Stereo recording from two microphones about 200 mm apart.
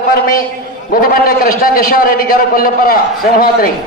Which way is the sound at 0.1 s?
45° left (ahead or behind).